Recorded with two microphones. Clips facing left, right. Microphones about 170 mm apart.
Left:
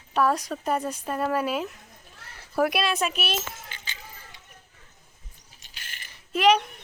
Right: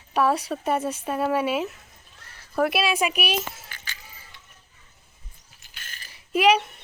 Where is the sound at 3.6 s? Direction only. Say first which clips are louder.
Left 1 dB; 20° left (ahead or behind).